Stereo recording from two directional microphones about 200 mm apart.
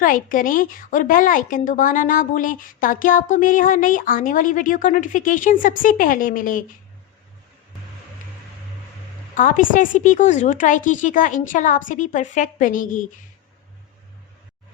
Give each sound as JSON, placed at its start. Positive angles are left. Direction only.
{"t": 0.0, "sound": "speech", "side_deg": 40}
{"t": 9.3, "sound": "speech", "side_deg": 40}